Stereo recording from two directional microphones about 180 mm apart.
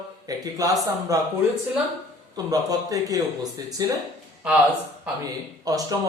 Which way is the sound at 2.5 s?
20° right (ahead or behind).